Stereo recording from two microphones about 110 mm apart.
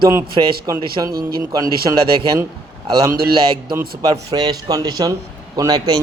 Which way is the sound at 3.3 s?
55° right (ahead or behind).